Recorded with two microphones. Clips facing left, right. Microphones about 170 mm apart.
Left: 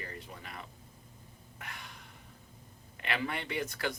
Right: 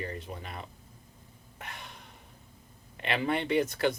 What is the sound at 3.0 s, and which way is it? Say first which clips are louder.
Speech: right 6 dB; 25° right (ahead or behind).